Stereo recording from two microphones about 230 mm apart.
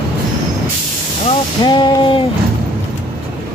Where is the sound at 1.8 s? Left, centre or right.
Left.